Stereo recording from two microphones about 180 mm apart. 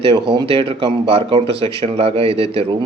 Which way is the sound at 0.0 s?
25° right (ahead or behind).